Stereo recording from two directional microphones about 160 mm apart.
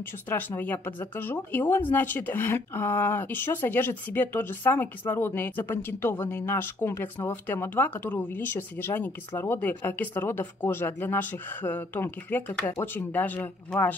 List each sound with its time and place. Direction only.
0.3 s speech: 10° left (ahead or behind)